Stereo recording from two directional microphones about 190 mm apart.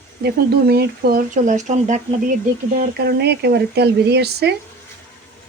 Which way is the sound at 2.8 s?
55° right (ahead or behind).